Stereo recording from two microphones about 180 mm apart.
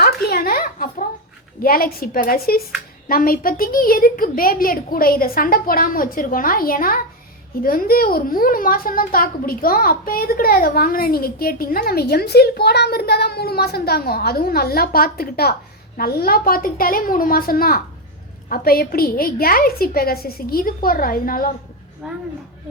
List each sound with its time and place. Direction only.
0.0 s a sound: 60° left (ahead or behind)
1.6 s a child's voice: 55° left (ahead or behind)
22.0 s speech: 5° right (ahead or behind)